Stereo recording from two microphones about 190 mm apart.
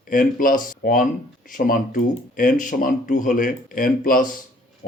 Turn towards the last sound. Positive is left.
turn(degrees=45)  # may be behind; listen again after turning